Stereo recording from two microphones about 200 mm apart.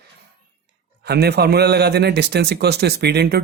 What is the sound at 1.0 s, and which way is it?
Speech, 55° right (ahead or behind).